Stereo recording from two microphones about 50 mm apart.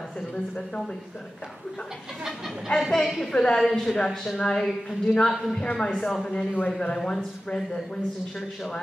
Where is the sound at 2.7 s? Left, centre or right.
Centre.